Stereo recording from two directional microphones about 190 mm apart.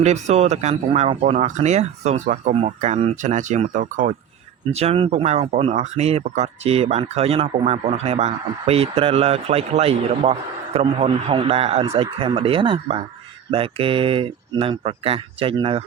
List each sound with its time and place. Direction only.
0.0 s speech: 35° right (ahead or behind)